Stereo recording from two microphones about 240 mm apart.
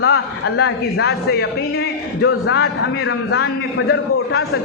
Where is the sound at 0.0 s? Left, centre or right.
Left.